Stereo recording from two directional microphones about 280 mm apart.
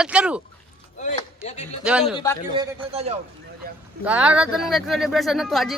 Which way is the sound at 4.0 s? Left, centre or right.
Centre.